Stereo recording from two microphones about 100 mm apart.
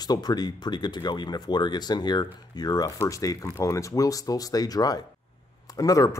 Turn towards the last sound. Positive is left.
turn(degrees=35)  # may be behind; listen again after turning